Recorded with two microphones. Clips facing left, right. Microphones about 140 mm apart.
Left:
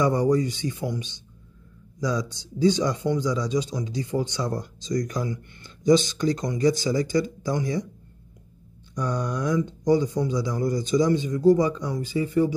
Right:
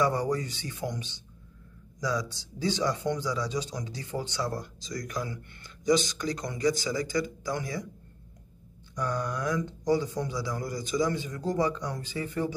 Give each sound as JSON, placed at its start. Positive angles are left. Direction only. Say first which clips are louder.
{"t": 0.0, "sound": "speech", "louder": "left 6 dB", "side_deg": 15}
{"t": 2.0, "sound": "speech", "louder": "left 4 dB", "side_deg": 20}
{"t": 8.9, "sound": "speech", "louder": "left 4 dB", "side_deg": 15}